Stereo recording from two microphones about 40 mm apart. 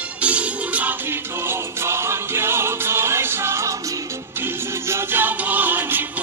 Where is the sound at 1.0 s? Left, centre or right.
Right.